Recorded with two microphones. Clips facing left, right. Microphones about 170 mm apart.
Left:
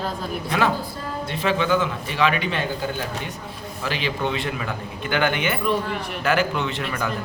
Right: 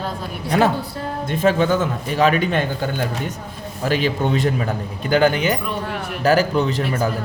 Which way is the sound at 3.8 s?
45° right (ahead or behind).